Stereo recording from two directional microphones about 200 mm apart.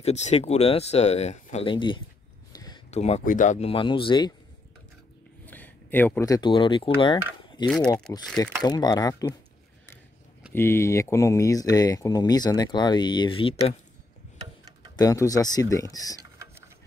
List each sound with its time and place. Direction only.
0.0 s speech: 35° left (ahead or behind)
2.5 s a sound: 20° left (ahead or behind)
2.9 s speech: 35° left (ahead or behind)
5.4 s speech: 10° left (ahead or behind)
10.5 s speech: 10° left (ahead or behind)
15.0 s speech: 15° left (ahead or behind)
16.2 s a sound: 15° right (ahead or behind)